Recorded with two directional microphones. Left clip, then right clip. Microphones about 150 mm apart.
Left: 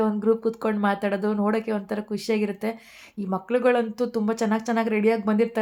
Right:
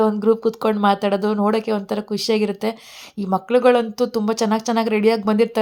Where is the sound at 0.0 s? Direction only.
25° right (ahead or behind).